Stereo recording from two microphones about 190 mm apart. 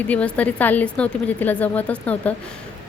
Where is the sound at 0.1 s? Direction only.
5° left (ahead or behind).